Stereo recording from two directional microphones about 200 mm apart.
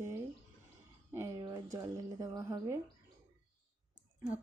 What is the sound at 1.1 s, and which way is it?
A woman's voice, 15° right (ahead or behind).